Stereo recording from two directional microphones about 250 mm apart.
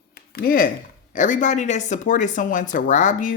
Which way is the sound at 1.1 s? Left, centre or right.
Left.